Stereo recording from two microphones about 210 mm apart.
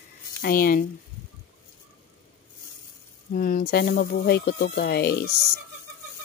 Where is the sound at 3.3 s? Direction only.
45° left (ahead or behind).